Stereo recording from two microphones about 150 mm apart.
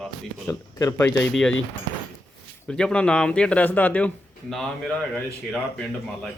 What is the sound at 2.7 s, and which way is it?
Speech, 5° left (ahead or behind).